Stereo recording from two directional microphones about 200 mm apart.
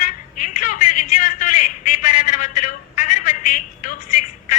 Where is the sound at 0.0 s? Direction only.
40° left (ahead or behind).